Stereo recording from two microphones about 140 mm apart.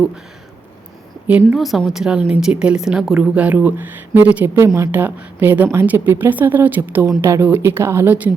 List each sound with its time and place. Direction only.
1.3 s a woman's voice: 15° right (ahead or behind)
1.5 s a woman's voice: centre (ahead or behind)